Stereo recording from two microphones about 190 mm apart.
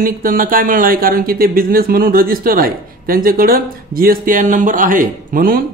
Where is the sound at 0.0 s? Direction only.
45° right (ahead or behind).